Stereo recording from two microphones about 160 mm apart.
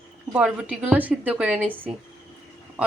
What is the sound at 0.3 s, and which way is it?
Speech, 5° right (ahead or behind).